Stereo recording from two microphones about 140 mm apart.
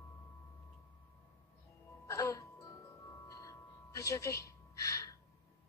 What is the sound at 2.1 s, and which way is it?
Music, 20° left (ahead or behind).